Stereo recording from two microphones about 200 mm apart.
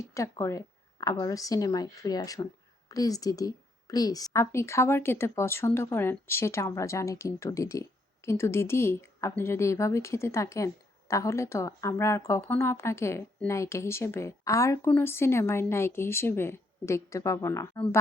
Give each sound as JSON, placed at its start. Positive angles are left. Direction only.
{"t": 0.0, "sound": "a woman's voice", "side_deg": 15}